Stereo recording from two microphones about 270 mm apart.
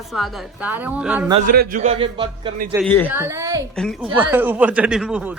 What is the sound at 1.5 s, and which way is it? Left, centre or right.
Speech, right.